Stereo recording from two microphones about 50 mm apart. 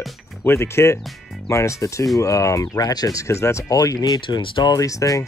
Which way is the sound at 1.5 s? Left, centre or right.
Left.